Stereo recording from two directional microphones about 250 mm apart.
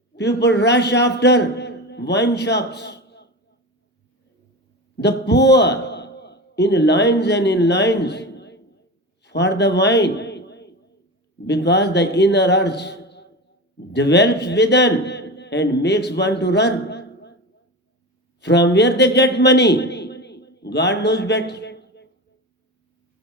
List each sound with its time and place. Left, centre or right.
0.2 s a man's voice: left
4.9 s a man's voice: left
9.2 s a sound: left
11.4 s a man's voice: left
18.3 s a man's voice: left